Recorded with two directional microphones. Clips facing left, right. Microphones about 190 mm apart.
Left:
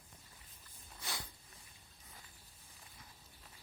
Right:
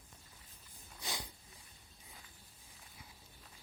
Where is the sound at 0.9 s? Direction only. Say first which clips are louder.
Right 2 dB; 20° right (ahead or behind).